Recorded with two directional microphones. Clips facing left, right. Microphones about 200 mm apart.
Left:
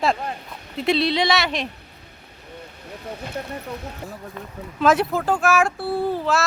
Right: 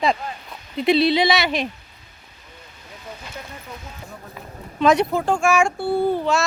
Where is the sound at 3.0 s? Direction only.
60° left (ahead or behind).